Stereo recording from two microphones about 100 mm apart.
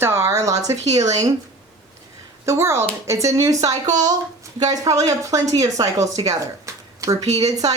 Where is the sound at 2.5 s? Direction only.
25° right (ahead or behind).